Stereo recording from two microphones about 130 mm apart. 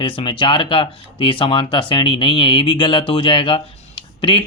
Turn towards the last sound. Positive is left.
turn(degrees=40)  # may be behind; listen again after turning